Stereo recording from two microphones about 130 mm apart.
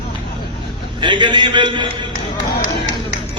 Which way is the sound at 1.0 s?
35° right (ahead or behind).